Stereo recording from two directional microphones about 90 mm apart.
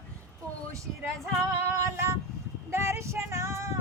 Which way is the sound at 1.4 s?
30° right (ahead or behind).